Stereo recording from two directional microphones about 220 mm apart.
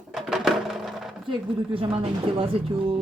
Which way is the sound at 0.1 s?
Centre (ahead or behind).